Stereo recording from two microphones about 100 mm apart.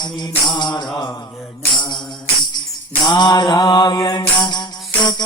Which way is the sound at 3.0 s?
45° left (ahead or behind).